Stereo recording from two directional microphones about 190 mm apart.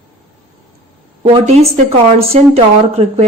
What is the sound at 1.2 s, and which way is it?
Speech, 30° right (ahead or behind).